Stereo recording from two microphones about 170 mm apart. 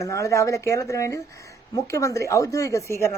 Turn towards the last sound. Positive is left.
turn(degrees=15)  # may be behind; listen again after turning